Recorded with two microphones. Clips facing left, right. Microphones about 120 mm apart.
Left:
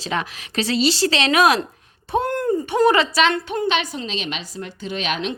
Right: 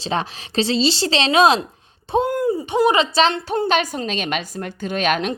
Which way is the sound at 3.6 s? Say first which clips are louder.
Right 3 dB; 45° right (ahead or behind).